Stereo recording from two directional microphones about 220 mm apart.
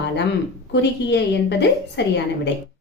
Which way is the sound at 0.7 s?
50° left (ahead or behind).